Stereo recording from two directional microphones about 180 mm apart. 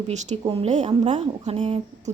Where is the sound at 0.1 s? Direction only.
40° right (ahead or behind).